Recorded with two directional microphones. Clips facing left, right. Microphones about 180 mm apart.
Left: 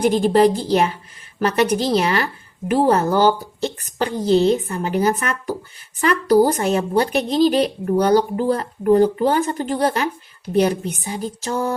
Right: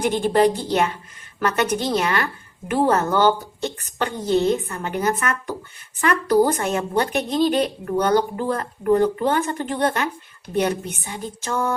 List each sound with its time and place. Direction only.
0.0 s speech: 40° left (ahead or behind)